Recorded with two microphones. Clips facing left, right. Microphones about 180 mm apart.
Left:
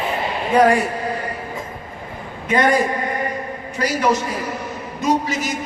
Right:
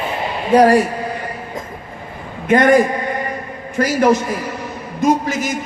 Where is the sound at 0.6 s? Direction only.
40° right (ahead or behind).